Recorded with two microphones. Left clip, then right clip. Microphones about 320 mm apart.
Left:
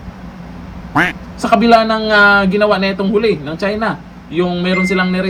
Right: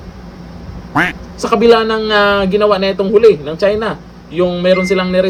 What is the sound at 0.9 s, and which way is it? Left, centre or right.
Speech, centre.